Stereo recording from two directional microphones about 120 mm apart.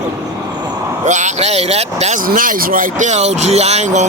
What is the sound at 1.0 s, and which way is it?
Speech, 90° right.